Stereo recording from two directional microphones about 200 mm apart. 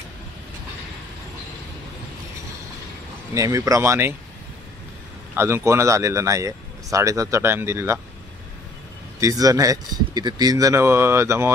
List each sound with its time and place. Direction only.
3.3 s speech: 15° right (ahead or behind)
5.3 s speech: 10° right (ahead or behind)
9.2 s speech: 15° right (ahead or behind)